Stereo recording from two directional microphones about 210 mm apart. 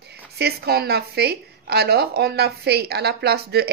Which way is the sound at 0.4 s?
50° right (ahead or behind).